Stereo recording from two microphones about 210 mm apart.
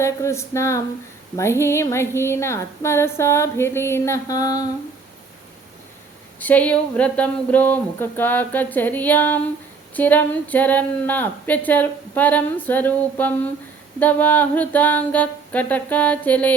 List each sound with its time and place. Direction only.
0.0 s speech: 15° left (ahead or behind)
6.4 s speech: 5° left (ahead or behind)